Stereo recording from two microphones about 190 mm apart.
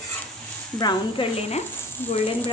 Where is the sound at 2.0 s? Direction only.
10° left (ahead or behind).